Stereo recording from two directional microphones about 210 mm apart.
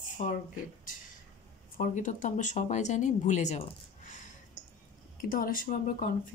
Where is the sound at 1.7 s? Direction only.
40° left (ahead or behind).